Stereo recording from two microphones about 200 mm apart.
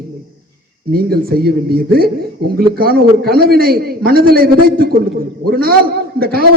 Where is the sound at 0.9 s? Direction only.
50° right (ahead or behind).